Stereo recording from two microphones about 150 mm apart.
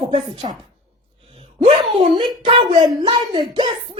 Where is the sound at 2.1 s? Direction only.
35° right (ahead or behind).